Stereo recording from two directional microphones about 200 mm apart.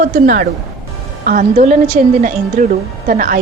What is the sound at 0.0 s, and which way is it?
A woman's voice, 50° right (ahead or behind).